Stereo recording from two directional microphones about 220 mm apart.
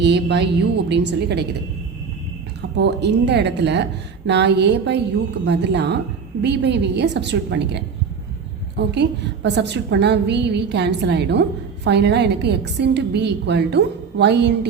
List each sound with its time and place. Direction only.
0.0 s a woman's voice: 50° right (ahead or behind)
2.7 s a woman's voice: 50° right (ahead or behind)